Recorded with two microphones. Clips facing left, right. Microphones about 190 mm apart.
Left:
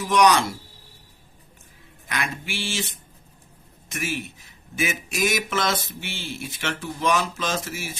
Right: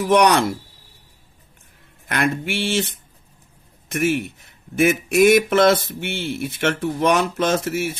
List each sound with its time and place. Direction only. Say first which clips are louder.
0.0 s speech: right 3 dB; 60° right (ahead or behind)
2.0 s speech: right 9 dB; 60° right (ahead or behind)